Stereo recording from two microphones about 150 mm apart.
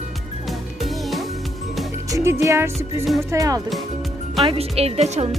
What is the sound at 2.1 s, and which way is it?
Music, 20° right (ahead or behind).